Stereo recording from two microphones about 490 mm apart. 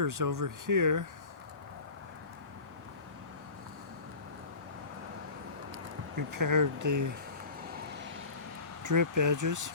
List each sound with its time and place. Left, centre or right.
0.0 s speech: right
5.7 s speech: right
8.8 s speech: right